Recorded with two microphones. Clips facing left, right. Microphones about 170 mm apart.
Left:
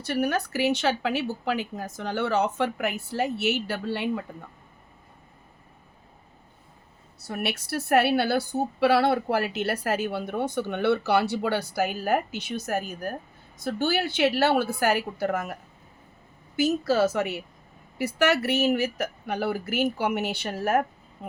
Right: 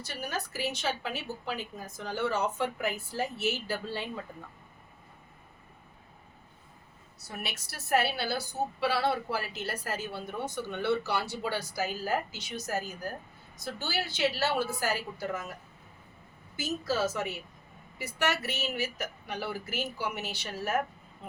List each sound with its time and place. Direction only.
0.0 s speech: 65° left (ahead or behind)
7.3 s a woman's voice: 65° left (ahead or behind)
16.6 s a woman's voice: 65° left (ahead or behind)